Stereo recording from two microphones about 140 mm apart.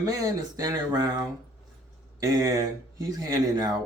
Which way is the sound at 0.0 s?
25° right (ahead or behind).